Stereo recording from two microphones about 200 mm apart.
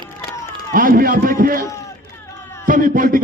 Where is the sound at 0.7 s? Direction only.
45° right (ahead or behind).